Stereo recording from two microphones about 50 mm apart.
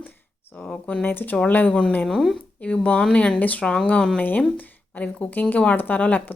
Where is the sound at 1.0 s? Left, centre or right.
Left.